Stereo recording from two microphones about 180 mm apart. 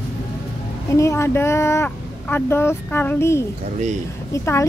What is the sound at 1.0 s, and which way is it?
Speech, 15° left (ahead or behind).